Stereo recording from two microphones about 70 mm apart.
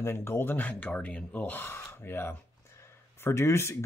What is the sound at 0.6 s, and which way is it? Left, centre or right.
Speech, centre.